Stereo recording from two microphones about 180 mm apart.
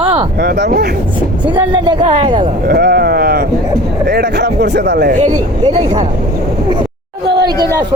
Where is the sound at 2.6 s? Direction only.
60° right (ahead or behind).